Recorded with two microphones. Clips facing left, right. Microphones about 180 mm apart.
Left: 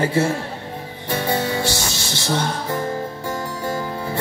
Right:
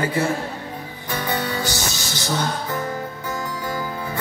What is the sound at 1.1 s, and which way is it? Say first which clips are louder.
Music: left 3 dB; 25° left (ahead or behind).